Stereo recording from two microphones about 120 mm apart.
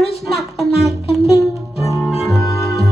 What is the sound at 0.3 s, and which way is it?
Music, centre (ahead or behind).